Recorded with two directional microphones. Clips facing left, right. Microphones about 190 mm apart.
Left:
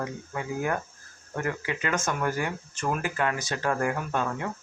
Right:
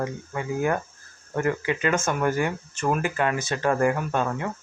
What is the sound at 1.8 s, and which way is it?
Speech, 25° right (ahead or behind).